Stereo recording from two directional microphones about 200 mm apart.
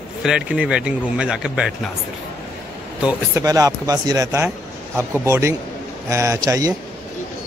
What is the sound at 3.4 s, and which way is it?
Speech, 20° right (ahead or behind).